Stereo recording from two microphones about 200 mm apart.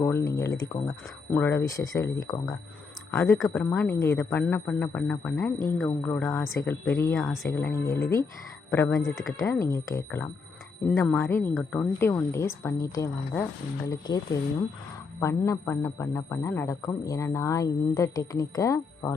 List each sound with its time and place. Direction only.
0.0 s a man's voice: 15° left (ahead or behind)
3.3 s a man's voice: 5° left (ahead or behind)
7.5 s a man's voice: 15° left (ahead or behind)
9.0 s speech: centre (ahead or behind)
9.6 s a man's voice: 15° left (ahead or behind)